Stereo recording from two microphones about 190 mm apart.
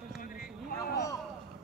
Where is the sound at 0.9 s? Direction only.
15° left (ahead or behind).